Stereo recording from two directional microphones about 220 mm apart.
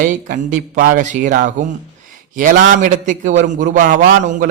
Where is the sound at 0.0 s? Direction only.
35° right (ahead or behind).